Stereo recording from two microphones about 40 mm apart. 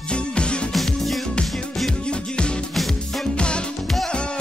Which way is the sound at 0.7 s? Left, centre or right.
Centre.